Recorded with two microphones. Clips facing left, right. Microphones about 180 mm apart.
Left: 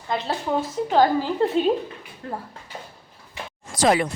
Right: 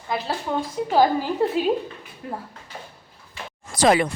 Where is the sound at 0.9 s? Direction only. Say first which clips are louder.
Even; 10° right (ahead or behind).